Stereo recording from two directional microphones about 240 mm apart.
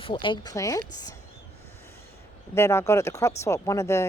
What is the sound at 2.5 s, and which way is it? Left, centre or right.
Speech, centre.